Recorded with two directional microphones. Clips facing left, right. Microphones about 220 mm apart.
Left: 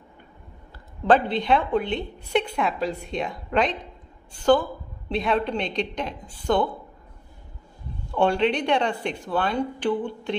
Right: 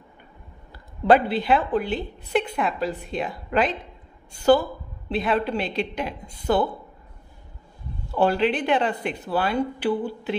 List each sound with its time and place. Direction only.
1.0 s a woman's voice: 10° right (ahead or behind)
8.1 s speech: 5° right (ahead or behind)